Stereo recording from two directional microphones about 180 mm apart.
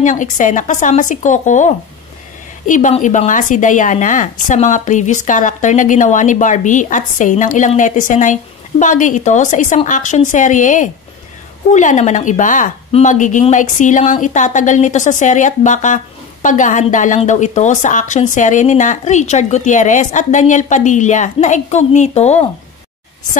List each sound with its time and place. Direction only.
0.0 s speech: 45° left (ahead or behind)